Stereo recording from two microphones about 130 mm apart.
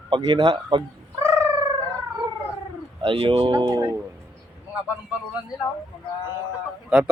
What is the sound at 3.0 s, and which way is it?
Speech, 40° right (ahead or behind).